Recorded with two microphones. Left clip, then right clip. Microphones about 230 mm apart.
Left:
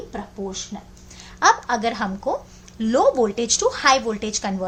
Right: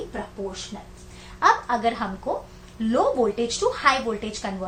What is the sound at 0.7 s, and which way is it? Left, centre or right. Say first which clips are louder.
A woman's voice: left 2 dB; left.